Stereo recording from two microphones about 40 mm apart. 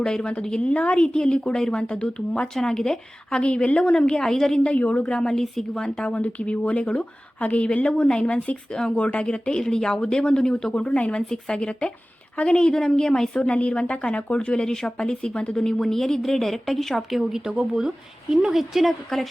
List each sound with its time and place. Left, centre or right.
0.0 s speech: left
0.6 s speech: left
2.6 s speech: centre
4.6 s a woman's voice: left
5.0 s a woman's voice: left
6.1 s a woman's voice: left
11.3 s a woman's voice: centre
13.3 s a woman's voice: left
14.7 s a woman's voice: centre
17.7 s speech: centre